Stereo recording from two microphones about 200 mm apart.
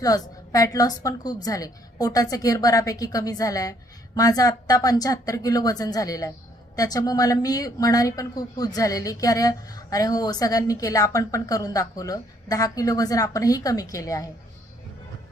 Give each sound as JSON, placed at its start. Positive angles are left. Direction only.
{"t": 0.0, "sound": "a woman's voice", "side_deg": 15}